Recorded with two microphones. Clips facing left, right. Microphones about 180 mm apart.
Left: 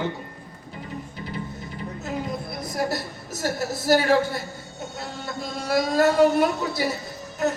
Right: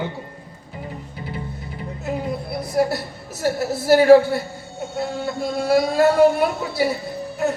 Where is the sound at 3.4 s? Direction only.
40° left (ahead or behind).